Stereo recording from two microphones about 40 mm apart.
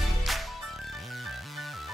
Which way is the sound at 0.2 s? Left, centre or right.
Centre.